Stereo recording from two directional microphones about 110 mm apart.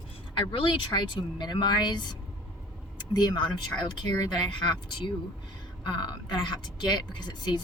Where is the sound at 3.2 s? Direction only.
40° left (ahead or behind).